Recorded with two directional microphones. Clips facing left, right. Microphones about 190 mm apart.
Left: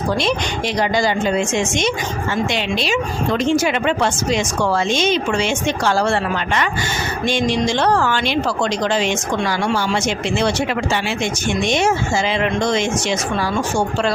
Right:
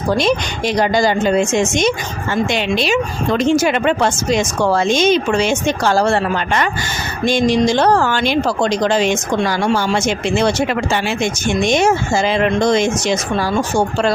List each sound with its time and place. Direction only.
0.8 s speech: 40° right (ahead or behind)